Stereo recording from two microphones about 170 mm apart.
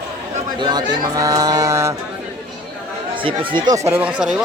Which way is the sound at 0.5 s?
25° right (ahead or behind).